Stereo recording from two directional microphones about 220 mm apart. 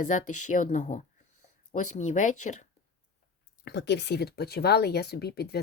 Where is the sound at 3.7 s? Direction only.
50° left (ahead or behind).